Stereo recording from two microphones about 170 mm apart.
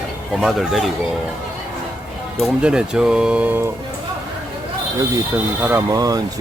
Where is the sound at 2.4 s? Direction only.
5° right (ahead or behind).